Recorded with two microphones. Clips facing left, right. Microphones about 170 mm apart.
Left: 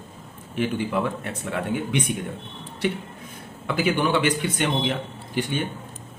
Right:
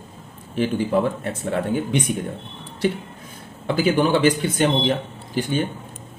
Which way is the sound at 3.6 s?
35° right (ahead or behind).